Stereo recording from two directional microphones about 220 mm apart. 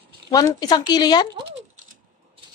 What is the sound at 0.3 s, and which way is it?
A woman's voice, 15° left (ahead or behind).